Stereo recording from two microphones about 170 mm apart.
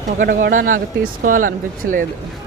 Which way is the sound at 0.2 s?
60° right (ahead or behind).